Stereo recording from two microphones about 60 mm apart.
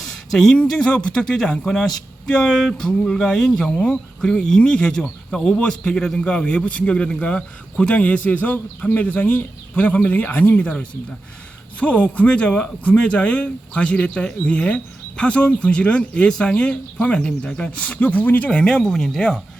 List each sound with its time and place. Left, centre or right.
0.0 s a sound: centre
0.7 s a man's voice: centre; by 10.7 s left
11.8 s speech: left; by 19.4 s centre